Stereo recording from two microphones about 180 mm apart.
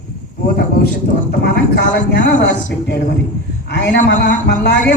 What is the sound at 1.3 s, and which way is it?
A man's voice, 65° left (ahead or behind).